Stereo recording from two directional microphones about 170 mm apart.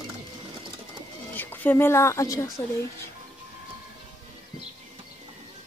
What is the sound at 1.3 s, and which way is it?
Speech, 10° left (ahead or behind).